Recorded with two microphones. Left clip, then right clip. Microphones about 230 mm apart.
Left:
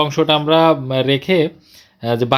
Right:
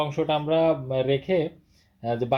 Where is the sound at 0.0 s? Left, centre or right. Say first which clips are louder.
Left 10 dB; left.